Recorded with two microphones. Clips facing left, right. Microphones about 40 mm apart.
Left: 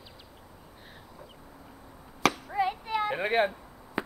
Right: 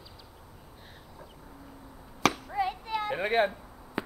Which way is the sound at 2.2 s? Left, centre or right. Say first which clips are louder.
Left 1 dB; centre.